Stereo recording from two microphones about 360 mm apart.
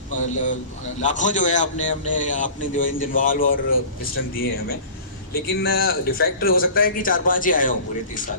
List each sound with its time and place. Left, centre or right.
1.0 s a man's voice: centre